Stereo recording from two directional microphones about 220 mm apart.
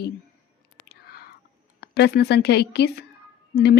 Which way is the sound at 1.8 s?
45° left (ahead or behind).